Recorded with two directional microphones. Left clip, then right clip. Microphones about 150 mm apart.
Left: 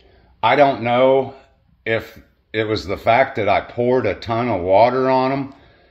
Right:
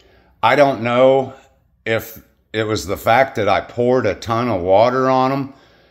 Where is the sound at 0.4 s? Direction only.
30° right (ahead or behind).